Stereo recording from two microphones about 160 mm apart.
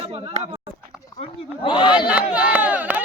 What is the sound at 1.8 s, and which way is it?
Speech, 5° right (ahead or behind).